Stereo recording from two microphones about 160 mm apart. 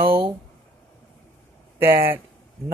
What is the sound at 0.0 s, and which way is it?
Speech, 35° right (ahead or behind).